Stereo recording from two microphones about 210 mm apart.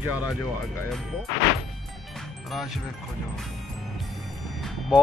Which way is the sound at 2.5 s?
Centre (ahead or behind).